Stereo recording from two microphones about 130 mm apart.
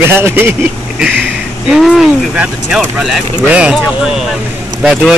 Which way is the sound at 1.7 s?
Centre (ahead or behind).